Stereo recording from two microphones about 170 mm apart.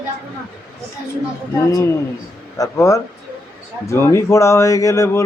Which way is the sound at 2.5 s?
20° left (ahead or behind).